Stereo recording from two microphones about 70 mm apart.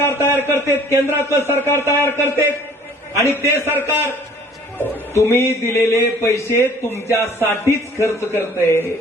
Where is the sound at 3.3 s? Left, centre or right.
Right.